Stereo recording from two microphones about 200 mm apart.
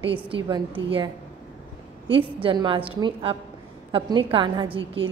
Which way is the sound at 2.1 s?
25° right (ahead or behind).